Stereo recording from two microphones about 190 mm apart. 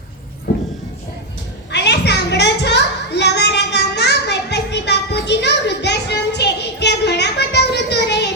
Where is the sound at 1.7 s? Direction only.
65° left (ahead or behind).